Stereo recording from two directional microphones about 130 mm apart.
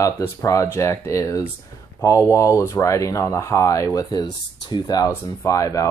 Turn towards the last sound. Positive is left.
turn(degrees=25)  # may be behind; listen again after turning